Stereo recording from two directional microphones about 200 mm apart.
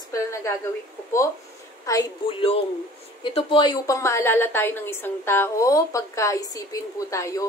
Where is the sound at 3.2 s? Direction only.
25° left (ahead or behind).